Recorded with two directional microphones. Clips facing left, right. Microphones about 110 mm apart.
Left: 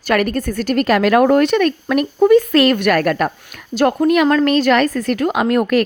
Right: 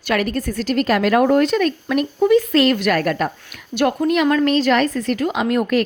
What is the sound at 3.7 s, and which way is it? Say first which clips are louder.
Speech: left 3 dB; 50° left (ahead or behind).